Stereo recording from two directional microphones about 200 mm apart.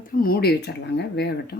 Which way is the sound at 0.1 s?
45° left (ahead or behind).